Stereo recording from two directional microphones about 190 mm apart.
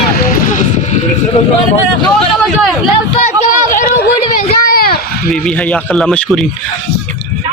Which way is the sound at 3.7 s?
50° left (ahead or behind).